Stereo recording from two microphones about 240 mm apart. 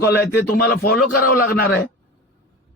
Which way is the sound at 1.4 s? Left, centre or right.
Left.